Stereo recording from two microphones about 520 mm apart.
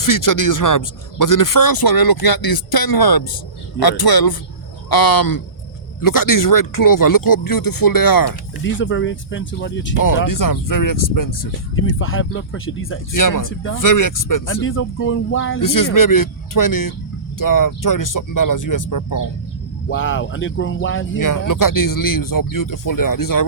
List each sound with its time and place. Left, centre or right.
0.0 s a man's voice: left
8.6 s speech: left
10.2 s speech: left
11.7 s speech: left
13.1 s speech: left
14.4 s speech: left
15.6 s speech: left
19.9 s speech: left
21.2 s speech: left